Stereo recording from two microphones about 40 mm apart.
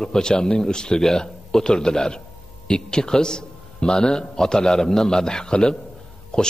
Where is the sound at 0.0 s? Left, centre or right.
Centre.